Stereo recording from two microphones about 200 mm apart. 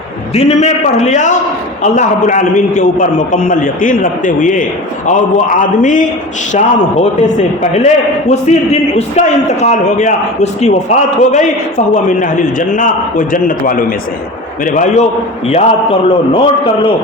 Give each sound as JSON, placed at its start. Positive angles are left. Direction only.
{"t": 0.3, "sound": "a man's voice", "side_deg": 35}